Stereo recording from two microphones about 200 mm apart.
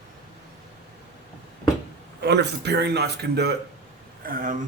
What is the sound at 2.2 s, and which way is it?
A man's voice, 55° right (ahead or behind).